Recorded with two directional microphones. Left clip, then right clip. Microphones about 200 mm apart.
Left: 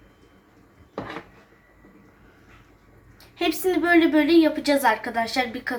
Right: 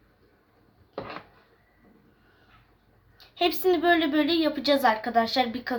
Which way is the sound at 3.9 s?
55° right (ahead or behind).